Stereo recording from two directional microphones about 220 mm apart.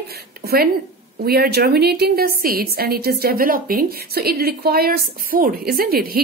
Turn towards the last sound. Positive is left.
turn(degrees=-45)  # may be behind; listen again after turning